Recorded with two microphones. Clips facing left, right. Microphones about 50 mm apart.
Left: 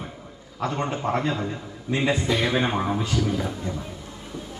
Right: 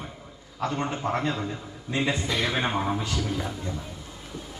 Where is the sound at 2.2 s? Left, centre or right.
Centre.